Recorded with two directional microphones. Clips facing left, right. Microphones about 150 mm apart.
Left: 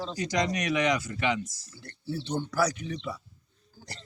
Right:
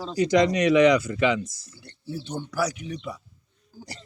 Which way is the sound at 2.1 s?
10° right (ahead or behind).